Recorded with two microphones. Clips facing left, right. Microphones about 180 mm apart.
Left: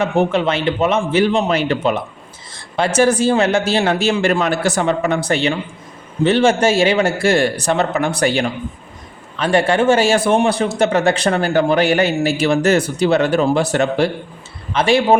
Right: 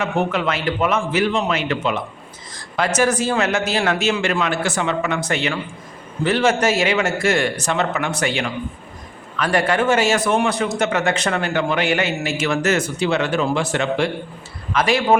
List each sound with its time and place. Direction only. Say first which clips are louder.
0.0 s a man's voice: left 5 dB; 30° left (ahead or behind)
9.4 s a man's voice: left 4 dB; 25° left (ahead or behind)